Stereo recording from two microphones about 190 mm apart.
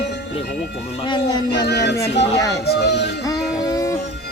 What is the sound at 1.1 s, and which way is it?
Speech, 20° left (ahead or behind).